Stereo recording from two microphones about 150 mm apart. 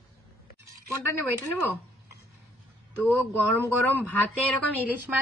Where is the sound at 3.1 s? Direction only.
10° left (ahead or behind).